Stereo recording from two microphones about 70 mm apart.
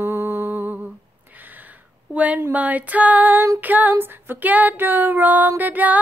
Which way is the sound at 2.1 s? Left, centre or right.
Right.